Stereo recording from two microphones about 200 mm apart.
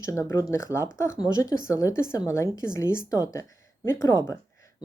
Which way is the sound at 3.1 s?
15° left (ahead or behind).